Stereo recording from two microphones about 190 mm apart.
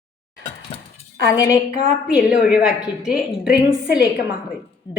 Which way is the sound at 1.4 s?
20° left (ahead or behind).